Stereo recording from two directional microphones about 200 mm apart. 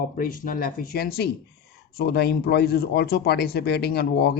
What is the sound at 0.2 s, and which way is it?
Speech, 45° left (ahead or behind).